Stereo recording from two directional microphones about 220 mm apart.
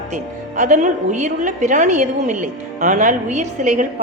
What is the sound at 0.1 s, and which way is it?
A woman's voice, 35° right (ahead or behind).